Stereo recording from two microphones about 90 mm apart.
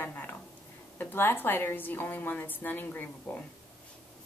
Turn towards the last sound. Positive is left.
turn(degrees=20)  # may be behind; listen again after turning